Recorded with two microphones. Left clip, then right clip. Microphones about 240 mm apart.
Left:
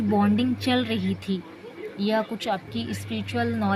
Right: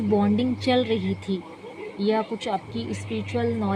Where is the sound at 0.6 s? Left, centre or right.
Left.